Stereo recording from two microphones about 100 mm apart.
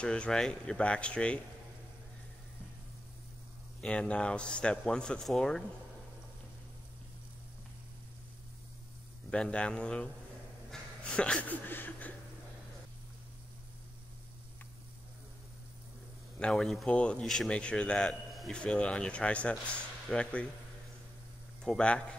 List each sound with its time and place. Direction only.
0.0 s a man's voice: 10° left (ahead or behind)
3.8 s a man's voice: 10° left (ahead or behind)
9.3 s a man's voice: 10° left (ahead or behind)
10.7 s a sound: 10° left (ahead or behind)
16.3 s a man's voice: 5° left (ahead or behind)
21.6 s a man's voice: 10° left (ahead or behind)